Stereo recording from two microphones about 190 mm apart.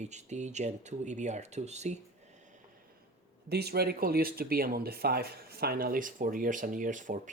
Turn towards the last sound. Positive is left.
turn(degrees=-40)  # may be behind; listen again after turning